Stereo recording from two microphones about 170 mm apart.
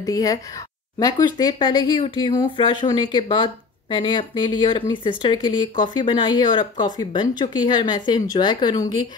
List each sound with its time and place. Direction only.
0.0 s speech: 20° left (ahead or behind)